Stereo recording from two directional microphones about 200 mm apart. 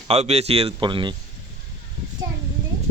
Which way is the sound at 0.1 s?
30° right (ahead or behind).